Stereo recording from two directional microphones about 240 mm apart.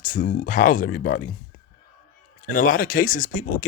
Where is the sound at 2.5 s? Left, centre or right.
Left.